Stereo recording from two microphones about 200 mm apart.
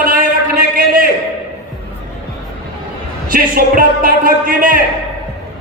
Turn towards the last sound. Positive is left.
turn(degrees=-45)  # may be behind; listen again after turning